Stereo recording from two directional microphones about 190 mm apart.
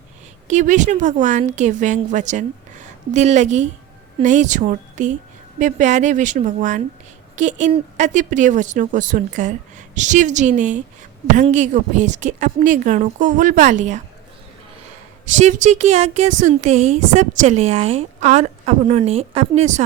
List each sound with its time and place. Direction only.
0.4 s speech: 40° right (ahead or behind)
15.4 s speech: 40° right (ahead or behind)